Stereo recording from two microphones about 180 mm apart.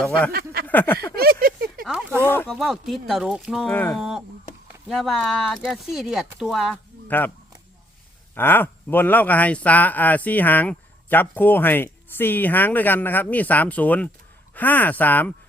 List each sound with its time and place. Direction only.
0.0 s speech: 5° left (ahead or behind)
0.3 s speech: 55° right (ahead or behind)
0.7 s speech: 10° left (ahead or behind)
1.1 s a sound: 60° right (ahead or behind)
1.8 s speech: 5° right (ahead or behind)
2.2 s speech: 10° left (ahead or behind)
2.6 s speech: centre (ahead or behind)
3.7 s speech: 10° left (ahead or behind)
8.4 s speech: 10° left (ahead or behind)